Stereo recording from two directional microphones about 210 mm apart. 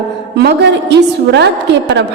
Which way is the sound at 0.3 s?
55° right (ahead or behind).